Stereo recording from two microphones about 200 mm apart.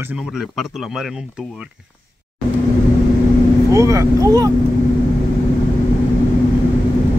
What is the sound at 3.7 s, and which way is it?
Speech, 15° right (ahead or behind).